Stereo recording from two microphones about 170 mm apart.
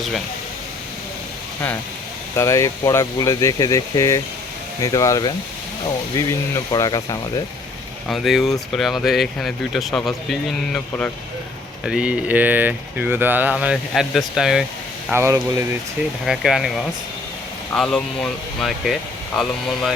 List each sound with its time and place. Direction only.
2.3 s speech: 20° left (ahead or behind)
8.0 s speech: centre (ahead or behind)
11.9 s speech: 5° right (ahead or behind)
15.1 s speech: 15° right (ahead or behind)
16.2 s speech: centre (ahead or behind)